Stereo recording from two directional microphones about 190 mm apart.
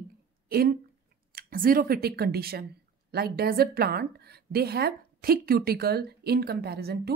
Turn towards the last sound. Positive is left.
turn(degrees=-55)  # may be behind; listen again after turning